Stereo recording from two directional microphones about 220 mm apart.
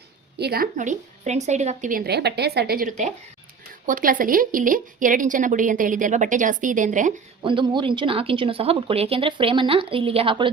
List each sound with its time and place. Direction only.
0.3 s a woman's voice: 45° right (ahead or behind)
7.4 s speech: 20° right (ahead or behind)